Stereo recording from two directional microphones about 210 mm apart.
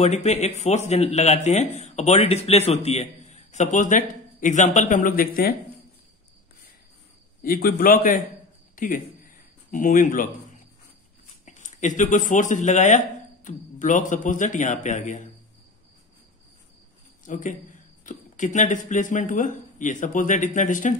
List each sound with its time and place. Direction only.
0.0 s speech: 30° left (ahead or behind)
7.4 s a man's voice: 45° left (ahead or behind)
17.3 s speech: 35° left (ahead or behind)